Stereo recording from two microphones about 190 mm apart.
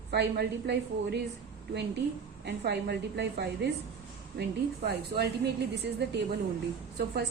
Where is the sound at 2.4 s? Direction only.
60° right (ahead or behind).